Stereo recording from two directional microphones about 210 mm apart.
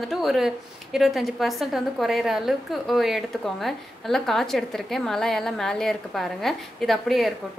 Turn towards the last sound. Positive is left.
turn(degrees=0)  # may be behind; listen again after turning